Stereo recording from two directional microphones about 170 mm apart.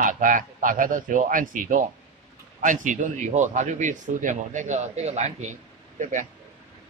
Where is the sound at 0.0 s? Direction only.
50° right (ahead or behind).